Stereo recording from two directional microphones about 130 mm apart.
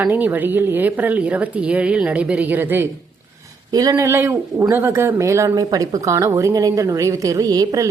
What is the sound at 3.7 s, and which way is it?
A woman's voice, 30° right (ahead or behind).